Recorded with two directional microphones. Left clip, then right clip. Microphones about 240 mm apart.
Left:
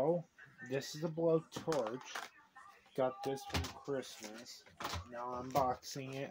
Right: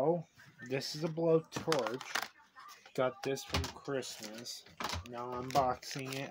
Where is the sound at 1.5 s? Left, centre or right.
Right.